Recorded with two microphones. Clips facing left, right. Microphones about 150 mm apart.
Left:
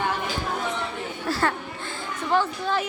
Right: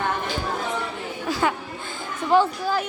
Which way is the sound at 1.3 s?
Centre (ahead or behind).